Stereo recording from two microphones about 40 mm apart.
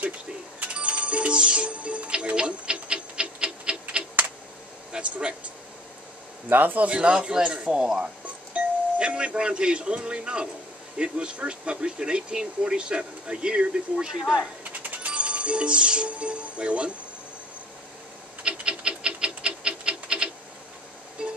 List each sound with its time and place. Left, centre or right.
0.6 s music: right
3.8 s typing: right
4.9 s air conditioning: right
6.5 s a man's voice: right
6.9 s speech: right
14.6 s music: right
15.1 s speech: right
18.4 s a sound: right
21.2 s music: right